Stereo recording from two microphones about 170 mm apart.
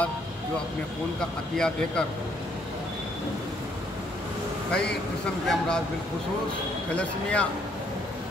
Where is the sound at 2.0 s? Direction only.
5° left (ahead or behind).